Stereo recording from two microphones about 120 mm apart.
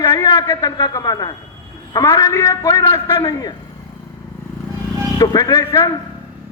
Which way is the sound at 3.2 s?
30° left (ahead or behind).